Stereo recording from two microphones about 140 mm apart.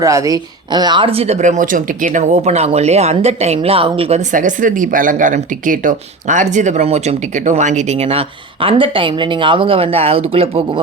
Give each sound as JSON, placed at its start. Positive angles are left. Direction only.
{"t": 0.0, "sound": "speech", "side_deg": -25}
{"t": 4.3, "sound": "speech", "side_deg": -70}
{"t": 8.6, "sound": "speech", "side_deg": -40}